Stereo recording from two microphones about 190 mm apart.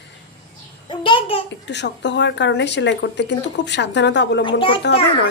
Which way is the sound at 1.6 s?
65° left (ahead or behind).